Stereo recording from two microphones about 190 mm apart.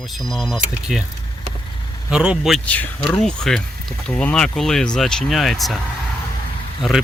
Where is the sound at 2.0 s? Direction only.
5° right (ahead or behind).